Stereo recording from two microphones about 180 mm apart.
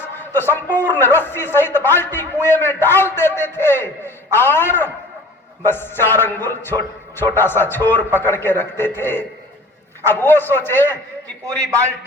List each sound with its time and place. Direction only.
0.2 s a man's voice: 10° left (ahead or behind)